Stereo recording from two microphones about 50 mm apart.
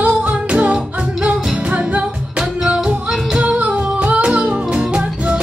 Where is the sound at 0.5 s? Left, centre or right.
Centre.